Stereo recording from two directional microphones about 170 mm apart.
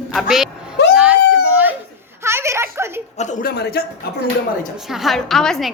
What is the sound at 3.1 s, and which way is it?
Speech, 45° left (ahead or behind).